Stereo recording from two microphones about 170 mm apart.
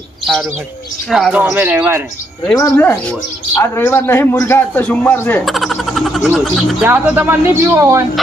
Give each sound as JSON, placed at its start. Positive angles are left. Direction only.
{"t": 1.1, "sound": "speech", "side_deg": -5}
{"t": 2.6, "sound": "a man's voice", "side_deg": 15}
{"t": 5.5, "sound": "speech", "side_deg": 0}